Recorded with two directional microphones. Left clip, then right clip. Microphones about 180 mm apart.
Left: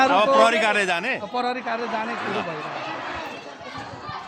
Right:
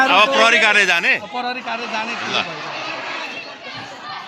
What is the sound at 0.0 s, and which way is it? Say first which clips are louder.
A man's voice: right 3 dB; 15° left (ahead or behind).